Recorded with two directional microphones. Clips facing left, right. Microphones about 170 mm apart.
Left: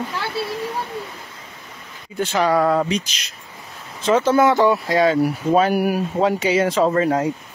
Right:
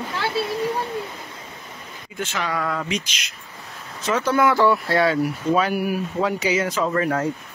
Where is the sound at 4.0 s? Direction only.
25° left (ahead or behind).